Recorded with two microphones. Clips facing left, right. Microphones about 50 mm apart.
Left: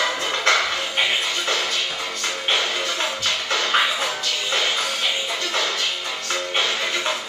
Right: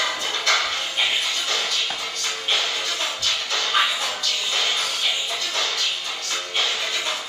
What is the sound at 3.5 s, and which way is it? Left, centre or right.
Music, left.